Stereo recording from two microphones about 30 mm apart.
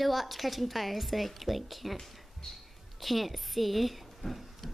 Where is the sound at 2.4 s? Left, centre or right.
Left.